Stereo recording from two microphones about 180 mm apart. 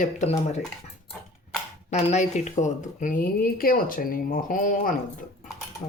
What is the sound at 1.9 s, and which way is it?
Speech, 40° left (ahead or behind).